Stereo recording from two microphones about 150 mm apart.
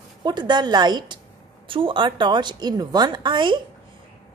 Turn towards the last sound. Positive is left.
turn(degrees=-30)  # may be behind; listen again after turning